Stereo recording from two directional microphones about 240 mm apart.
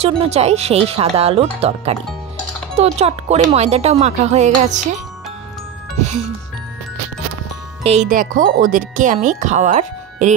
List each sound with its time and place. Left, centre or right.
0.0 s speech: right
5.9 s music: right
7.8 s speech: right